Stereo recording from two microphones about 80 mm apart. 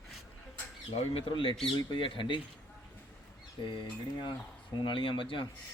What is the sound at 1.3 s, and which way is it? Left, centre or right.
Speech, left.